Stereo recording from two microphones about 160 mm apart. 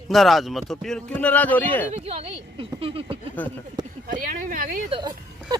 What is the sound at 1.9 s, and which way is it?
Speech, 40° right (ahead or behind).